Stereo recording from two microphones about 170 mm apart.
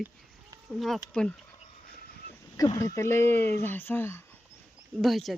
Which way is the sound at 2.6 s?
20° left (ahead or behind).